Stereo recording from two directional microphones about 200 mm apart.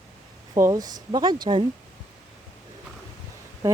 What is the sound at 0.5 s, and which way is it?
Speech, 15° right (ahead or behind).